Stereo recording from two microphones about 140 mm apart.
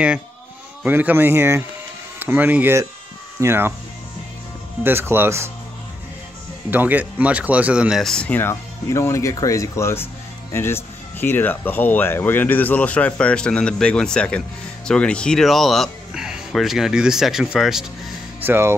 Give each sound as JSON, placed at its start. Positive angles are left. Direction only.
{"t": 0.8, "sound": "speech", "side_deg": -15}
{"t": 4.8, "sound": "speech", "side_deg": -15}
{"t": 6.7, "sound": "speech", "side_deg": -10}
{"t": 18.4, "sound": "speech", "side_deg": -15}